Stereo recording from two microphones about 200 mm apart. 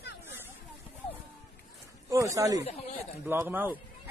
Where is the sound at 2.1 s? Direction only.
15° right (ahead or behind).